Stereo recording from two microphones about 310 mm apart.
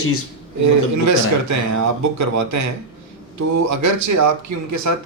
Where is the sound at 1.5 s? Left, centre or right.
Right.